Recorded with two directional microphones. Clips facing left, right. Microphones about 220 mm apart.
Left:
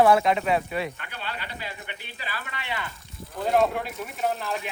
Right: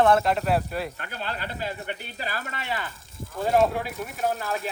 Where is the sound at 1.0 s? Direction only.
40° right (ahead or behind).